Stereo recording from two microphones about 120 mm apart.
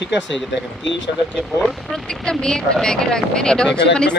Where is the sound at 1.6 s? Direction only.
5° left (ahead or behind).